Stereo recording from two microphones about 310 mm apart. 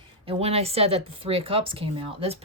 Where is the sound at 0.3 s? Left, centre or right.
Centre.